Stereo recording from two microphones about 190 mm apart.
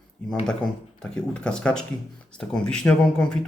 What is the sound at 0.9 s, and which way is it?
Speech, 5° left (ahead or behind).